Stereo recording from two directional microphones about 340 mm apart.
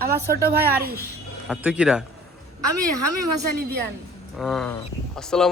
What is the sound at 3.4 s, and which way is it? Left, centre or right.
Speech, right.